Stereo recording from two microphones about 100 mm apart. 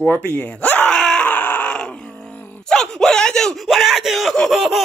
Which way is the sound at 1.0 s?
5° left (ahead or behind).